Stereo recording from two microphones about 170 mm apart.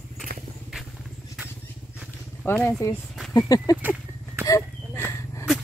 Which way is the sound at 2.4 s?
15° left (ahead or behind).